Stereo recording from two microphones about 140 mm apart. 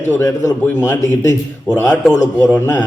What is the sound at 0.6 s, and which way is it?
A man's voice, 10° left (ahead or behind).